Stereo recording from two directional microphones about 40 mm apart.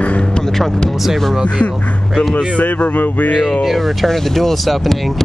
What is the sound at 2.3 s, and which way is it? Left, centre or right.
Speech, left.